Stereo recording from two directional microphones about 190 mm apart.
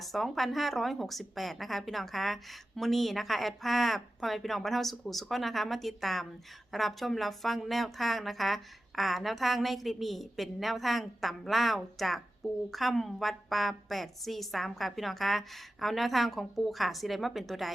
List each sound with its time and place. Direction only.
0.0 s a woman's voice: centre (ahead or behind)